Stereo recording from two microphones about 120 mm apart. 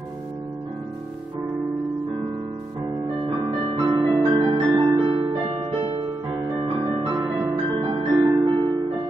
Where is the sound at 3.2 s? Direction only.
45° right (ahead or behind).